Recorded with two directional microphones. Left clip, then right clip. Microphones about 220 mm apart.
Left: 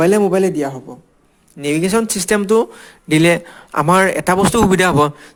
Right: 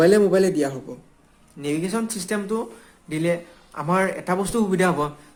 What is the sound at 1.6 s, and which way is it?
A man's voice, 40° left (ahead or behind).